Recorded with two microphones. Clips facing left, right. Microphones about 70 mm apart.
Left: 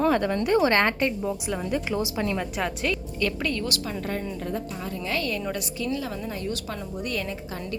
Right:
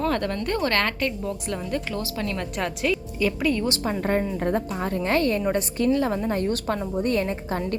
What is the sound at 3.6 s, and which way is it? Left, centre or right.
A woman's voice, right.